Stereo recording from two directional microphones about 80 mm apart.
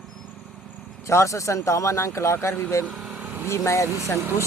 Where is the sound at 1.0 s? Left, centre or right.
Left.